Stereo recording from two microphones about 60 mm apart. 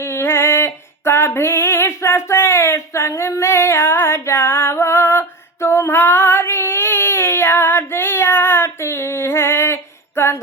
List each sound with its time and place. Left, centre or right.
0.0 s female singing: left
6.0 s child singing: left